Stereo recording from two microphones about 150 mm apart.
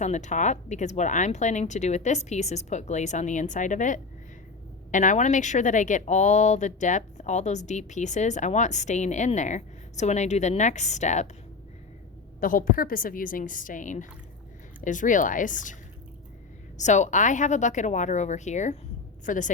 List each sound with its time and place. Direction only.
0.0 s speech: 50° left (ahead or behind)
12.4 s a woman's voice: 65° left (ahead or behind)
16.7 s speech: 55° left (ahead or behind)